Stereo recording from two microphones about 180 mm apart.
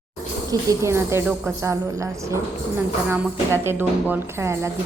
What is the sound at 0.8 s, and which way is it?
Speech, 15° right (ahead or behind).